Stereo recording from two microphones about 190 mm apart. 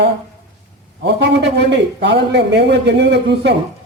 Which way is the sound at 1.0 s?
65° right (ahead or behind).